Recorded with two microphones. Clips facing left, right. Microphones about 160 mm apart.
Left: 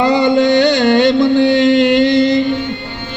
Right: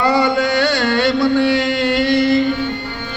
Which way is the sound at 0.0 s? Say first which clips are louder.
Left 4 dB; 20° left (ahead or behind).